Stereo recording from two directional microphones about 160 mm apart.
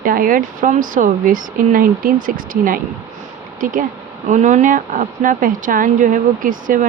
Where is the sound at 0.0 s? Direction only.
60° right (ahead or behind).